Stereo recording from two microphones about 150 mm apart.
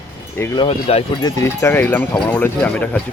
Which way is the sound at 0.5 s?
40° left (ahead or behind).